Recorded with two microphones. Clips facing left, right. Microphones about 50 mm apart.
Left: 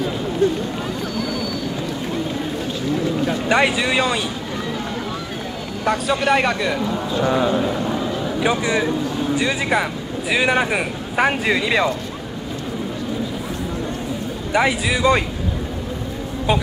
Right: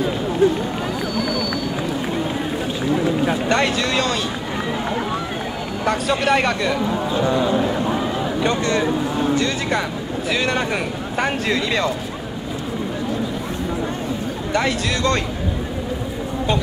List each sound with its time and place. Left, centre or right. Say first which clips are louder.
0.4 s speech: right 2 dB; centre
2.9 s a sound: right 2 dB; right
3.4 s speech: left 1 dB; centre
5.9 s a man's voice: left 1 dB; centre
6.8 s a man's voice: right 1 dB; centre
7.2 s speech: left 1 dB; centre
7.8 s a sound: right 1 dB; right
8.4 s speech: left 1 dB; centre
14.5 s speech: left 3 dB; centre